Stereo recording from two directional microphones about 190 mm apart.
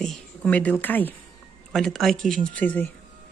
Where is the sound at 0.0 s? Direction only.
5° left (ahead or behind).